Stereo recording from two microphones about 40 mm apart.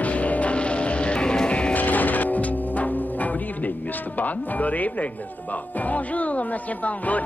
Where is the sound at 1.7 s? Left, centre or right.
Left.